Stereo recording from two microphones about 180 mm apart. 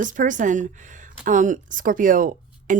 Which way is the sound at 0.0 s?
45° right (ahead or behind).